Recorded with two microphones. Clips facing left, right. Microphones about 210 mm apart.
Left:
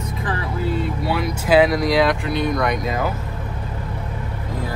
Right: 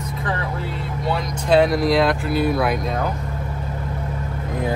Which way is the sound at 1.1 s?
Centre (ahead or behind).